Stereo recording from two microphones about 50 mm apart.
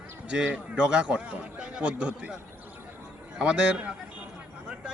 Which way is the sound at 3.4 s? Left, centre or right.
Centre.